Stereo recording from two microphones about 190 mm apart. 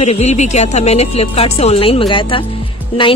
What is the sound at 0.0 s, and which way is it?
A woman's voice, 35° left (ahead or behind).